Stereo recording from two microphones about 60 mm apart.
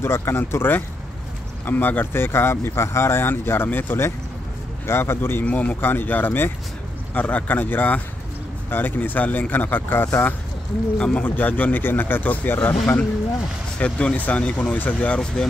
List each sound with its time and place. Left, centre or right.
0.0 s speech: left
5.4 s speech: left
11.0 s speech: centre
11.2 s speech: left
13.7 s speech: centre